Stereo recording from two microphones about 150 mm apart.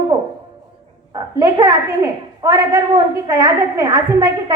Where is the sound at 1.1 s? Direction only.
25° right (ahead or behind).